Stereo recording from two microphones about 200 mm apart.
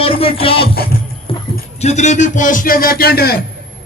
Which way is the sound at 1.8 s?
35° left (ahead or behind).